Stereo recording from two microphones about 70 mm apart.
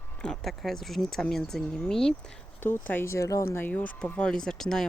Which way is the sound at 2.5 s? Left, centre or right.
Left.